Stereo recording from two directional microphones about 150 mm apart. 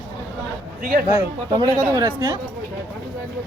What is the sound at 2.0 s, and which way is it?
Speech, 25° right (ahead or behind).